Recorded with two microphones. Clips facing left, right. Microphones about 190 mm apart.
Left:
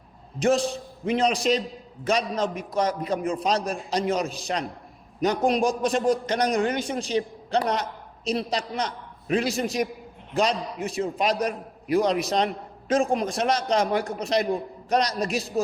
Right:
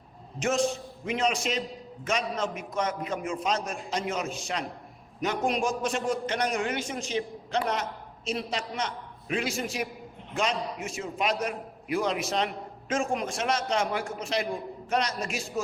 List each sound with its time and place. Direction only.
0.3 s a man's voice: 35° left (ahead or behind)